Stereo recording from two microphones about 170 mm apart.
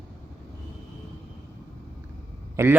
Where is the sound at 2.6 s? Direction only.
15° right (ahead or behind).